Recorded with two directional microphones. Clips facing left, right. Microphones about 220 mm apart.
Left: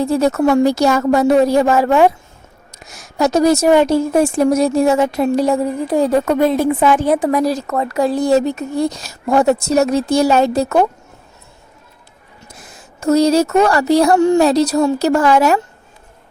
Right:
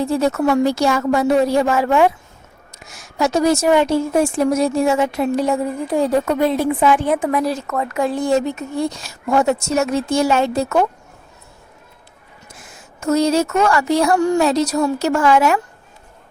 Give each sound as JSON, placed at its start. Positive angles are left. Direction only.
{"t": 0.0, "sound": "a woman's voice", "side_deg": 40}
{"t": 12.5, "sound": "a woman's voice", "side_deg": 35}